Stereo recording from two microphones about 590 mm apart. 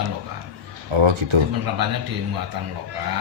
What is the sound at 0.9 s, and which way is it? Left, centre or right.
Speech, right.